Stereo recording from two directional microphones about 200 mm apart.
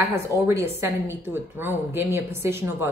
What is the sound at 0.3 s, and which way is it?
Speech, 15° left (ahead or behind).